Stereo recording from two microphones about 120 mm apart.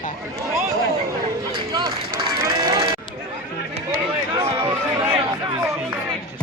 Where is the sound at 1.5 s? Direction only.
35° right (ahead or behind).